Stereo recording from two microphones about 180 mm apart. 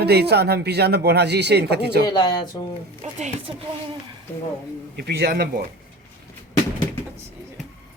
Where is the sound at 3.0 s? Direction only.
35° right (ahead or behind).